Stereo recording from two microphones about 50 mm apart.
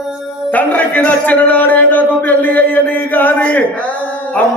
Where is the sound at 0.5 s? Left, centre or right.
Left.